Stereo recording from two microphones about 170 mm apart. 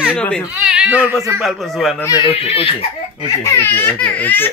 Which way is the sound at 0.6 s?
5° right (ahead or behind).